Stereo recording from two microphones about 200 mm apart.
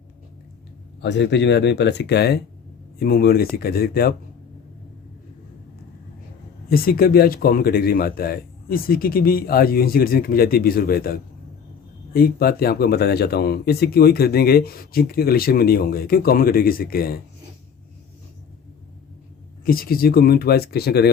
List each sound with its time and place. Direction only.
1.0 s speech: 60° left (ahead or behind)
6.7 s speech: 50° left (ahead or behind)
19.6 s speech: 45° left (ahead or behind)